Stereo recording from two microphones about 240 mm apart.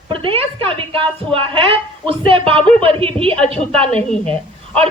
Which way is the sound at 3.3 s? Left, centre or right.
Centre.